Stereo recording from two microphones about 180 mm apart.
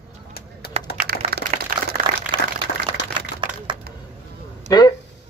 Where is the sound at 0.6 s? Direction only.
60° left (ahead or behind).